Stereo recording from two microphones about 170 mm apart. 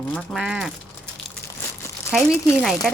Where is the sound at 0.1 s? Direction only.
Centre (ahead or behind).